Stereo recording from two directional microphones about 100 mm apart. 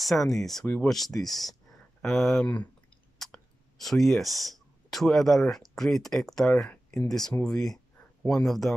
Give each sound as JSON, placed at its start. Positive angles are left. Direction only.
{"t": 0.0, "sound": "speech", "side_deg": 0}
{"t": 3.8, "sound": "speech", "side_deg": 0}
{"t": 7.4, "sound": "a sound", "side_deg": 5}
{"t": 8.5, "sound": "speech", "side_deg": 0}